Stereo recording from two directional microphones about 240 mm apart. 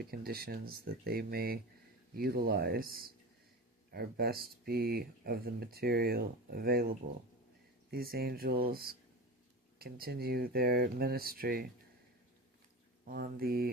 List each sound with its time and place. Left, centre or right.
0.0 s speech: right
13.1 s speech: right